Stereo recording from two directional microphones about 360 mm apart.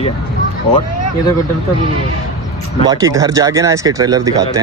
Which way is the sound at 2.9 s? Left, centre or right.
Centre.